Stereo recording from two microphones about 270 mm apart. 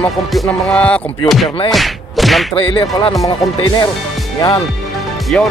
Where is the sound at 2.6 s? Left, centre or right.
Centre.